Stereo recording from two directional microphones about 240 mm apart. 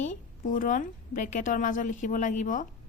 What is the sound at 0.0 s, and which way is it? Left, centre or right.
A woman's voice, left.